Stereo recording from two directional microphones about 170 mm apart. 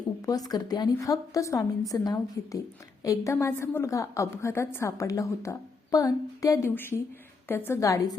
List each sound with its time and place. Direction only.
0.3 s a woman's voice: 20° left (ahead or behind)